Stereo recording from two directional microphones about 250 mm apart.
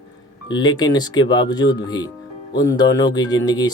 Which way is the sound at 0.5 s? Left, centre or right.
Centre.